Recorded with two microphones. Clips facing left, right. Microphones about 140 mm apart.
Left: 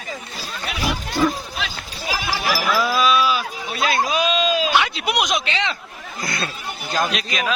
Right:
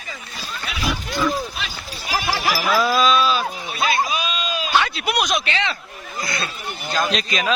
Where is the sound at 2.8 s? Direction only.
10° left (ahead or behind).